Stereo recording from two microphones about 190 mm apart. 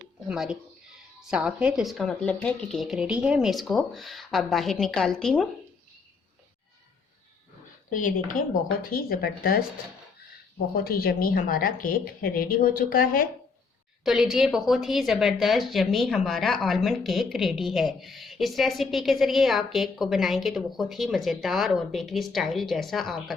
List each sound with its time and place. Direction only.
0.3 s a woman's voice: 5° right (ahead or behind)
7.9 s a woman's voice: 45° left (ahead or behind)
10.8 s a woman's voice: 50° left (ahead or behind)
14.0 s a woman's voice: centre (ahead or behind)